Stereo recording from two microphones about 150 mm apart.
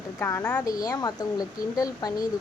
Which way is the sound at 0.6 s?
25° left (ahead or behind).